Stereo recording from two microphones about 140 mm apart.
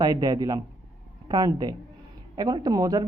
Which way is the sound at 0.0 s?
30° right (ahead or behind).